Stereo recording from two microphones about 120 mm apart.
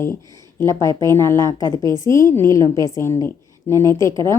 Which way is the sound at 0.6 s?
25° left (ahead or behind).